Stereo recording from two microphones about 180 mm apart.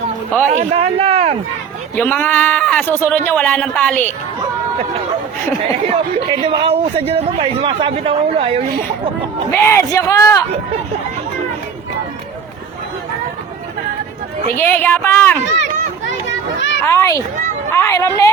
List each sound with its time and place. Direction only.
0.5 s a man's voice: 35° right (ahead or behind)
2.0 s speech: 10° left (ahead or behind)
6.4 s a man's voice: 25° right (ahead or behind)
9.5 s speech: 15° left (ahead or behind)
14.6 s speech: 10° left (ahead or behind)
16.8 s speech: 15° left (ahead or behind)